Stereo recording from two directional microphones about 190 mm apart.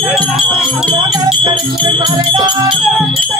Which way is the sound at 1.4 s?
25° right (ahead or behind).